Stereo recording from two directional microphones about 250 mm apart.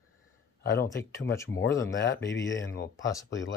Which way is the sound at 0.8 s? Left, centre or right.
Centre.